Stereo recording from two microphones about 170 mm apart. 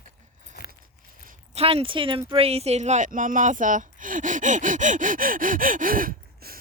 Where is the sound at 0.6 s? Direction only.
70° left (ahead or behind).